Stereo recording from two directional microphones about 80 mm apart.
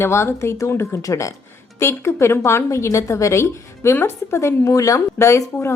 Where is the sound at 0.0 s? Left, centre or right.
Left.